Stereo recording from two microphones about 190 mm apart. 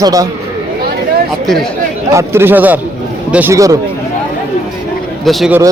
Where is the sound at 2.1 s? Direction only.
15° right (ahead or behind).